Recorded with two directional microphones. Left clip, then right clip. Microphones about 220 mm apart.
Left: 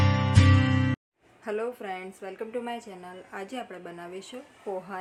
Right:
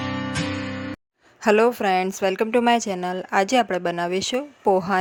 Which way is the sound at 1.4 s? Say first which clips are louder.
Right 14 dB; 50° right (ahead or behind).